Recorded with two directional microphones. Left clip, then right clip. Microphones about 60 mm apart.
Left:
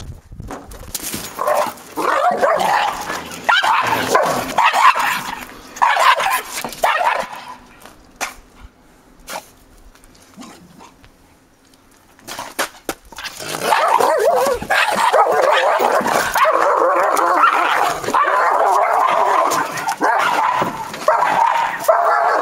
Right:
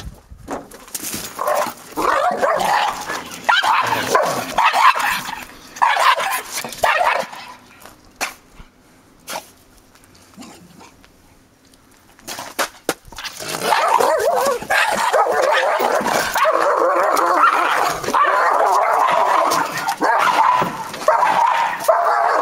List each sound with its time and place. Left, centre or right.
1.2 s dog: centre
6.5 s dog: centre
6.8 s dog: right
8.2 s dog: centre
10.4 s dog: centre
12.3 s a sound: centre
13.1 s dog: centre